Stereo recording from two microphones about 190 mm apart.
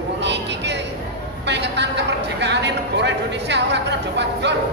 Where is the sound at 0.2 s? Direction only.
65° right (ahead or behind).